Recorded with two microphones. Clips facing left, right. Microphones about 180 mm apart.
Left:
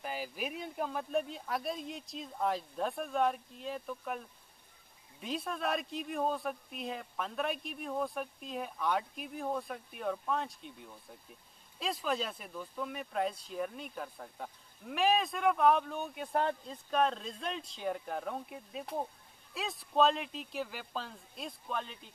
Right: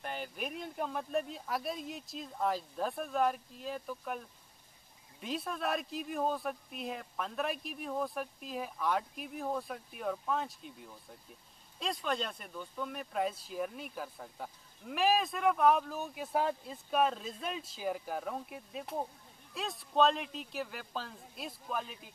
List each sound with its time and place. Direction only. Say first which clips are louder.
0.0 s speech: left 1 dB; 5° left (ahead or behind)